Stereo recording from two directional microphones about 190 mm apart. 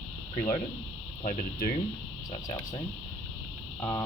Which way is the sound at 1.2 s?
40° left (ahead or behind).